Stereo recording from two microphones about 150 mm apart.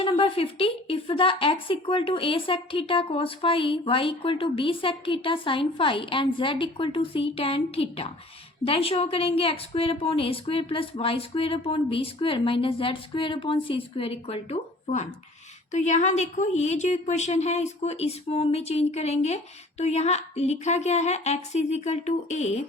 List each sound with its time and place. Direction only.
0.0 s a woman's voice: 40° left (ahead or behind)